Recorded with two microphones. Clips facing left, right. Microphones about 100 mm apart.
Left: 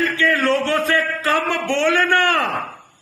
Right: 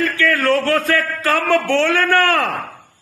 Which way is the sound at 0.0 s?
20° left (ahead or behind).